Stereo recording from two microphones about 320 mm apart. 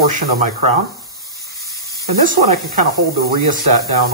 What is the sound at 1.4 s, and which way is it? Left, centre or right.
Spray, centre.